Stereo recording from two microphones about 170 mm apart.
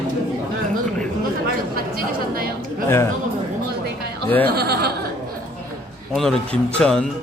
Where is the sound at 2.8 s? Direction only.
15° left (ahead or behind).